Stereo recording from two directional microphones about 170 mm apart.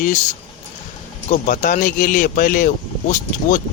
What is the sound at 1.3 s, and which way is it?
Speech, 50° left (ahead or behind).